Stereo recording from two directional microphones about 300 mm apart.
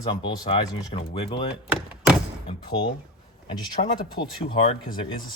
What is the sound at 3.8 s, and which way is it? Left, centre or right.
Speech, left.